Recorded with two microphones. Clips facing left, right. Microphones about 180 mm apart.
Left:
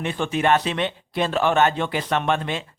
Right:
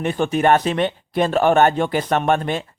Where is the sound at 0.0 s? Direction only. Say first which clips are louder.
Right 4 dB; 45° right (ahead or behind).